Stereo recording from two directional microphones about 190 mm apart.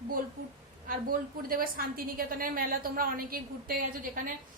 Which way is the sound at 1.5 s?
50° right (ahead or behind).